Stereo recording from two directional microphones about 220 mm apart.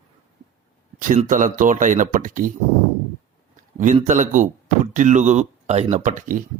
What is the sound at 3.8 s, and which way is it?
Speech, 35° right (ahead or behind).